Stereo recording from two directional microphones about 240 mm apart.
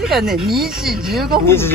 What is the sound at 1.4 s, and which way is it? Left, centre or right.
Speech, centre.